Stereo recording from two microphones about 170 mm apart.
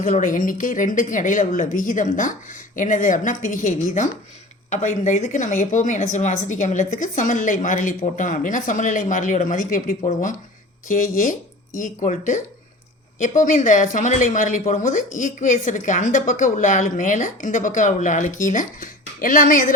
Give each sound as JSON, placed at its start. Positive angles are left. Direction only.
{"t": 0.0, "sound": "speech", "side_deg": 50}